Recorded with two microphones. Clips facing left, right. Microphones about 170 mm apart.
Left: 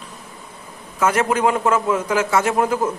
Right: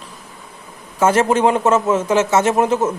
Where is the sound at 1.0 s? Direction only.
30° right (ahead or behind).